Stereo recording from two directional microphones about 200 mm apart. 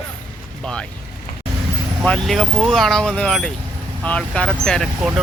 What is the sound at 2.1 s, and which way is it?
Speech, centre (ahead or behind).